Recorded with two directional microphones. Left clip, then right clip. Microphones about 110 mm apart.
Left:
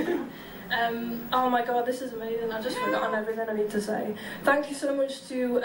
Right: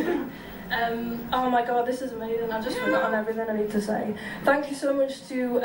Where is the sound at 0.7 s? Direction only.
20° left (ahead or behind).